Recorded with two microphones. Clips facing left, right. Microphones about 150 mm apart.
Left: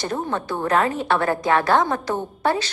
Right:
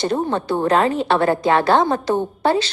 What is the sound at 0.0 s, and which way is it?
A woman's voice, 30° right (ahead or behind).